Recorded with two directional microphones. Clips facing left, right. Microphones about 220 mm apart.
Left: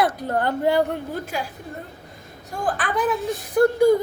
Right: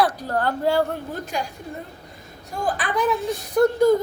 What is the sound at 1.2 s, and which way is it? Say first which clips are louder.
Speech: right 1 dB; 5° left (ahead or behind).